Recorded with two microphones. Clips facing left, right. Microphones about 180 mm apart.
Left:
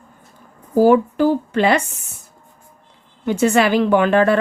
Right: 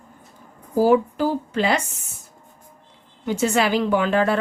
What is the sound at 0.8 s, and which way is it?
A woman's voice, 60° left (ahead or behind).